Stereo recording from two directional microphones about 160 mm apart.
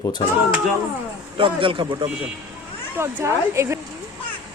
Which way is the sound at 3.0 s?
15° right (ahead or behind).